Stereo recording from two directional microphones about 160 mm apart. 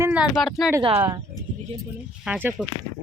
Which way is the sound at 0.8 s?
35° right (ahead or behind).